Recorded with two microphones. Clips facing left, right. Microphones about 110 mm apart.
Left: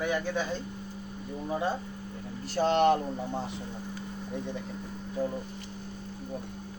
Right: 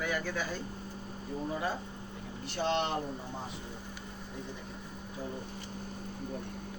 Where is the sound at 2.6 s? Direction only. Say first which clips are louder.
Left 8 dB; 45° left (ahead or behind).